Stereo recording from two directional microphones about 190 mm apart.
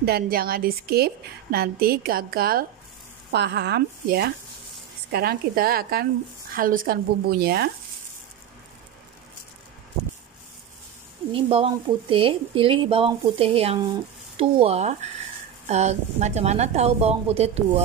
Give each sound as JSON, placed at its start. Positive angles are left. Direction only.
{"t": 0.0, "sound": "a woman's voice", "side_deg": -55}
{"t": 3.3, "sound": "a woman's voice", "side_deg": -60}
{"t": 11.3, "sound": "a woman's voice", "side_deg": -30}